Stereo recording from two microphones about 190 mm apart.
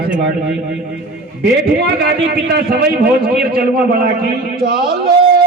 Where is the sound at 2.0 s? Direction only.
55° right (ahead or behind).